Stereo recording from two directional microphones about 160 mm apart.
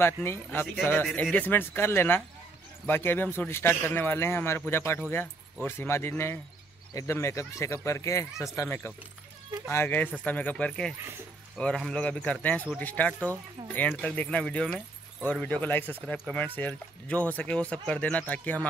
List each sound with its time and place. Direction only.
0.0 s a man's voice: 15° left (ahead or behind)